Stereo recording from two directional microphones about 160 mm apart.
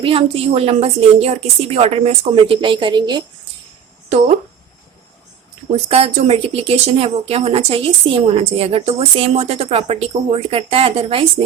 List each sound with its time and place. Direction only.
0.0 s speech: 35° right (ahead or behind)
5.7 s speech: 40° right (ahead or behind)